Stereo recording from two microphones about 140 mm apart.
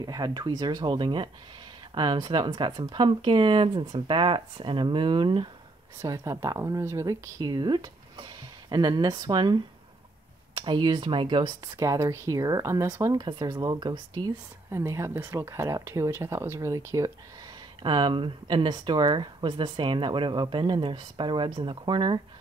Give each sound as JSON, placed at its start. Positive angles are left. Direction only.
{"t": 0.0, "sound": "speech", "side_deg": -30}
{"t": 5.9, "sound": "speech", "side_deg": -20}
{"t": 14.7, "sound": "speech", "side_deg": -20}
{"t": 17.8, "sound": "speech", "side_deg": -35}